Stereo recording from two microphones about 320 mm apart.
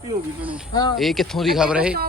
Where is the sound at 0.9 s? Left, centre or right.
Centre.